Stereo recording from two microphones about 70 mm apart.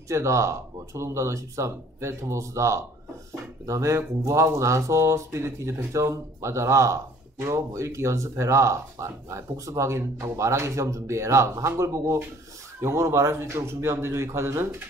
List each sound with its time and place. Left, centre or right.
0.1 s speech: right